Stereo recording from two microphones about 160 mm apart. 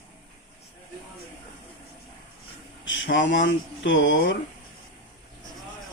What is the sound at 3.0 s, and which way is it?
Speech, 90° left.